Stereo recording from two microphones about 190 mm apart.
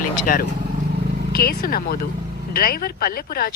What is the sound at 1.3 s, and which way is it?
Speech, 50° left (ahead or behind).